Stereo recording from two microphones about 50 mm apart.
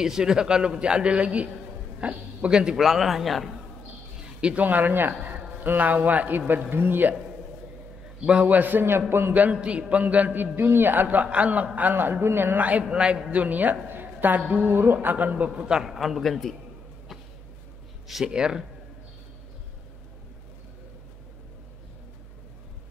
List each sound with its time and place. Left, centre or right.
0.0 s a man's voice: centre
2.8 s a man's voice: centre
4.4 s speech: right
4.6 s a man's voice: right
8.3 s a man's voice: right
9.3 s a man's voice: right
11.9 s speech: right
12.5 s a man's voice: right
12.8 s a woman's voice: centre
15.5 s a man's voice: centre
15.8 s a man's voice: centre
18.0 s speech: centre
18.3 s speech: centre